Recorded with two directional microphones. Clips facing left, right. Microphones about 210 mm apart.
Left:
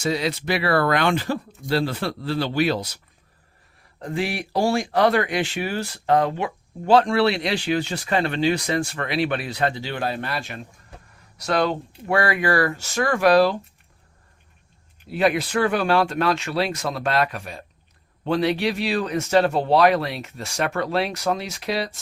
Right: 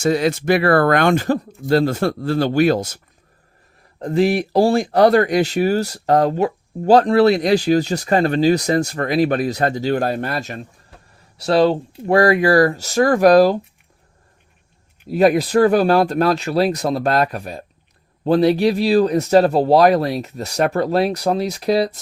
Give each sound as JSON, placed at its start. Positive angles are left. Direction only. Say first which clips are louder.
{"t": 0.0, "sound": "speech", "louder": "right 7 dB", "side_deg": -50}
{"t": 4.0, "sound": "speech", "louder": "right 10 dB", "side_deg": -40}
{"t": 11.3, "sound": "speech", "louder": "right 7 dB", "side_deg": -30}
{"t": 15.1, "sound": "speech", "louder": "right 7 dB", "side_deg": -40}